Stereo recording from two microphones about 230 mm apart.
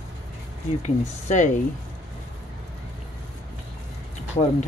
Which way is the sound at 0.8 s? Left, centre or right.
Left.